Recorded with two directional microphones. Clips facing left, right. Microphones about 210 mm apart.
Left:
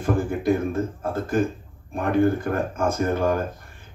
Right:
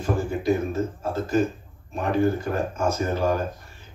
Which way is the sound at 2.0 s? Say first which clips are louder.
Left 2 dB; 55° left (ahead or behind).